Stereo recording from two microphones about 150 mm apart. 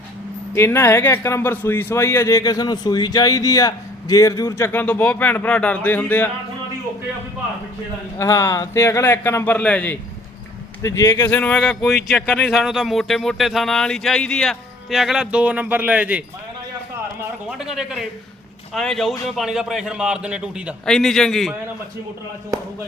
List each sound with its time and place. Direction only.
0.5 s a man's voice: 15° left (ahead or behind)
8.2 s a man's voice: 20° left (ahead or behind)
10.8 s a man's voice: 20° left (ahead or behind); by 20.7 s 5° right (ahead or behind)
20.8 s speech: 5° left (ahead or behind)